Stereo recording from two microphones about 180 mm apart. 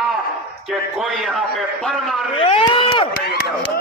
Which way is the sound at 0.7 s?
Centre (ahead or behind).